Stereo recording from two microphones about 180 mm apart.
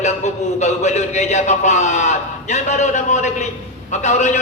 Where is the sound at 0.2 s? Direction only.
40° left (ahead or behind).